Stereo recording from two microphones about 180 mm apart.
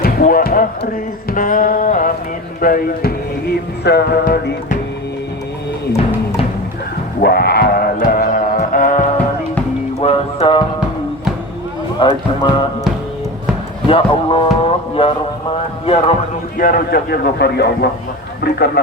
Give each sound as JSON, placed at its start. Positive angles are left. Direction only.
{"t": 0.0, "sound": "speech", "side_deg": 55}
{"t": 1.3, "sound": "a sound", "side_deg": 50}
{"t": 2.6, "sound": "music", "side_deg": 50}
{"t": 7.2, "sound": "music", "side_deg": 60}
{"t": 10.0, "sound": "music", "side_deg": 35}
{"t": 12.0, "sound": "speech", "side_deg": 25}
{"t": 13.8, "sound": "a sound", "side_deg": 30}
{"t": 16.6, "sound": "music", "side_deg": 50}
{"t": 18.4, "sound": "speech", "side_deg": 65}